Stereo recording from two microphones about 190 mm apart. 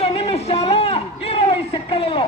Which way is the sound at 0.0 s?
30° left (ahead or behind).